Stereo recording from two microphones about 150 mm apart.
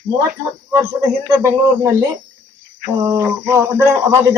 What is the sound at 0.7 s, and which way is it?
Speech, 20° right (ahead or behind).